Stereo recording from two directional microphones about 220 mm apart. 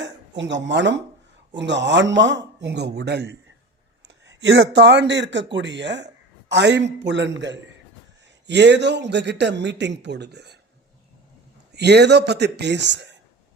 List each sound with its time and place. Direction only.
0.0 s speech: 55° right (ahead or behind)
11.7 s speech: 50° right (ahead or behind)